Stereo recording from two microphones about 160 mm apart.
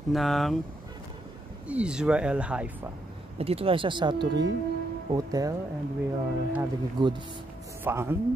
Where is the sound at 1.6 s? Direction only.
5° right (ahead or behind).